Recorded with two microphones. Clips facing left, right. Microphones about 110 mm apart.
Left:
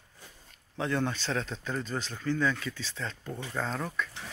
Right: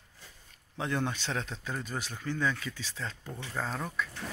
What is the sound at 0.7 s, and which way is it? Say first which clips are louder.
Speech: left 2 dB; 15° right (ahead or behind).